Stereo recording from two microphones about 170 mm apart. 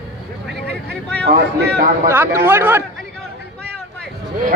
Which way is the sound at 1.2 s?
80° right.